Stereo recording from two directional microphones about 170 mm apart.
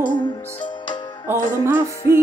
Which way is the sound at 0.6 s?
25° left (ahead or behind).